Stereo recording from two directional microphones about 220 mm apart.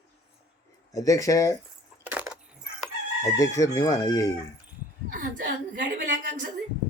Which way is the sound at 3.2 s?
15° left (ahead or behind).